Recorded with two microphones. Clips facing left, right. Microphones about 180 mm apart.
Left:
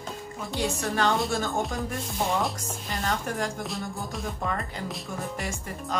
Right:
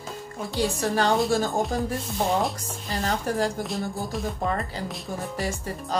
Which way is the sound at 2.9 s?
35° right (ahead or behind).